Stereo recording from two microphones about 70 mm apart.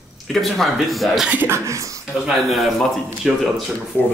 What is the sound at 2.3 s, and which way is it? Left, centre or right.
Speech, centre.